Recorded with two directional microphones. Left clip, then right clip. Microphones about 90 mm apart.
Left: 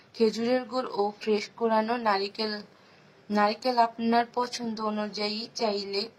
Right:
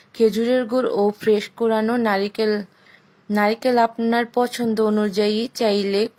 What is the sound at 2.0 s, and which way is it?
Speech, 50° right (ahead or behind).